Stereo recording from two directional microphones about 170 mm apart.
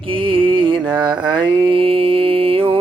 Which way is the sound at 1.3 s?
30° right (ahead or behind).